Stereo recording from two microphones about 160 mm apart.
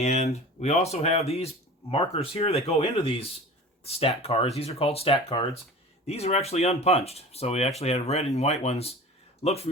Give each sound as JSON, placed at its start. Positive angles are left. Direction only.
{"t": 0.0, "sound": "speech", "side_deg": 45}